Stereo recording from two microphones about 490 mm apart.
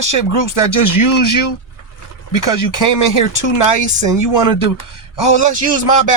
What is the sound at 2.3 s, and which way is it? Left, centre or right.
Speech, left.